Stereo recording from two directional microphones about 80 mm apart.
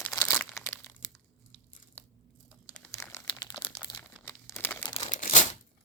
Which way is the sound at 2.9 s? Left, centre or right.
Left.